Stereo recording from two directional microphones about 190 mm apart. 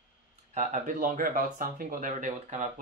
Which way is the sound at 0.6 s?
45° right (ahead or behind).